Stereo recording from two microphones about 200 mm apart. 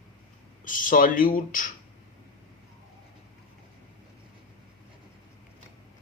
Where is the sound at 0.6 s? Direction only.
40° left (ahead or behind).